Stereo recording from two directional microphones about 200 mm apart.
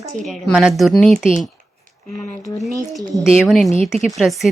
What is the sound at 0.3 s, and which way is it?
Speech, centre (ahead or behind).